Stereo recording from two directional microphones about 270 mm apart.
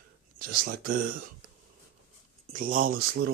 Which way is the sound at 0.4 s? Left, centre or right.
Right.